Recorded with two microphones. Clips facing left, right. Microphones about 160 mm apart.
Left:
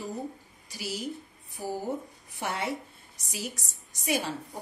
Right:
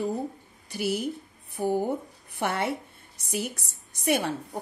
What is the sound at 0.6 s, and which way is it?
A woman's voice, 60° right (ahead or behind).